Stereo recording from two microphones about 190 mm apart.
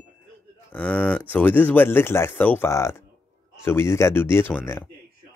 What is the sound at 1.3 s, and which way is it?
Speech, 10° left (ahead or behind).